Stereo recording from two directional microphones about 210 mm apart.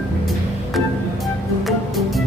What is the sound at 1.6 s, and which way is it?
Music, centre (ahead or behind).